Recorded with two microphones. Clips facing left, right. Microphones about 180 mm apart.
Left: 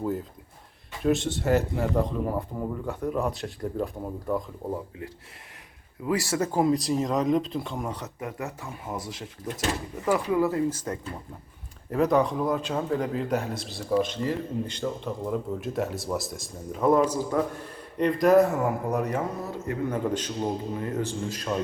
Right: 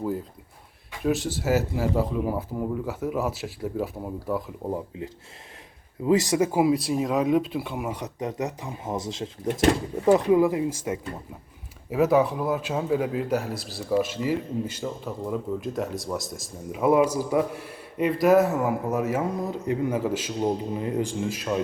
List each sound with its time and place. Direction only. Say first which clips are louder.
0.0 s a man's voice: even; centre (ahead or behind)
4.7 s a man's voice: right 3 dB; 20° right (ahead or behind)